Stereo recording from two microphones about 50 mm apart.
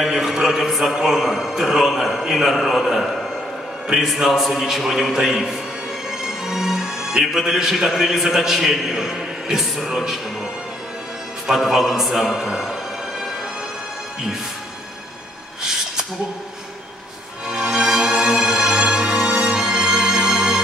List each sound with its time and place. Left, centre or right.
0.0 s a man's voice: centre
11.4 s a man's voice: centre
17.5 s music: centre